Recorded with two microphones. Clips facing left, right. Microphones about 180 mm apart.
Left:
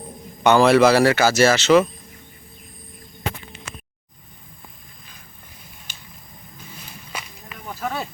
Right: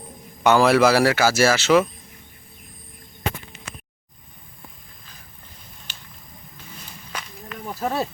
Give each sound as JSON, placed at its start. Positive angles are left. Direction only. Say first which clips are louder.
{"t": 0.4, "sound": "speech", "louder": "left 2 dB", "side_deg": -5}
{"t": 7.1, "sound": "walk", "louder": "right 2 dB", "side_deg": 10}
{"t": 7.8, "sound": "speech", "louder": "right 3 dB", "side_deg": -35}